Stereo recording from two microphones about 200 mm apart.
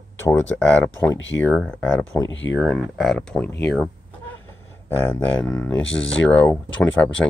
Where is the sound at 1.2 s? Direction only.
70° left (ahead or behind).